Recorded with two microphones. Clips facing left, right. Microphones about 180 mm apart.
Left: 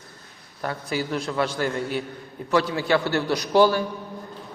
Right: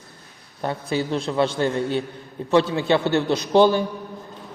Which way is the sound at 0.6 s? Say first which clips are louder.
Right 3 dB; 25° right (ahead or behind).